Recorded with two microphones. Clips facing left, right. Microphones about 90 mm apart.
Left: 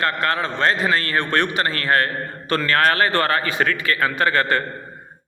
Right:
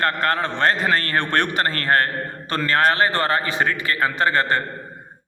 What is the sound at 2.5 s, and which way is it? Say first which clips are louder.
A man's voice: left 1 dB; 25° right (ahead or behind).